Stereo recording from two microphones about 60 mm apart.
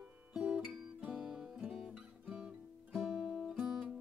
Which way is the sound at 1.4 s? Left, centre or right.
Centre.